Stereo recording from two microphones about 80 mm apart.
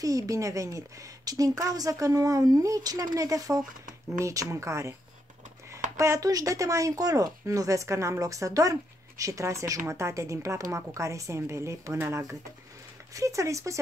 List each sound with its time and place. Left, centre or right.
0.0 s a woman's voice: right